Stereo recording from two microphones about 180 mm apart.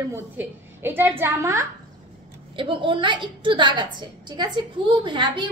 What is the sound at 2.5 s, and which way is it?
A woman's voice, 30° right (ahead or behind).